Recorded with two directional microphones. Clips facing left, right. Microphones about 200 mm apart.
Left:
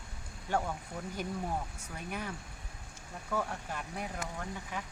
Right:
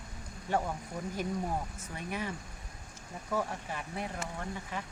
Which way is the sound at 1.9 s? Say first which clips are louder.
Right 3 dB; centre (ahead or behind).